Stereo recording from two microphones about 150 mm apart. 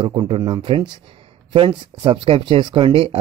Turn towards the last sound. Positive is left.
turn(degrees=-35)  # may be behind; listen again after turning